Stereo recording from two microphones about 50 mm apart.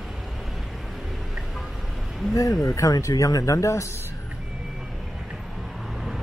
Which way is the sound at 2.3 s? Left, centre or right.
Left.